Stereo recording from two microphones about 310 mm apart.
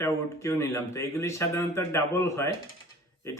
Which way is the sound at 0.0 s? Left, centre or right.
Centre.